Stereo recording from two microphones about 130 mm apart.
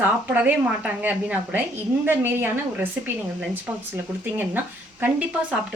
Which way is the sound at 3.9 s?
15° right (ahead or behind).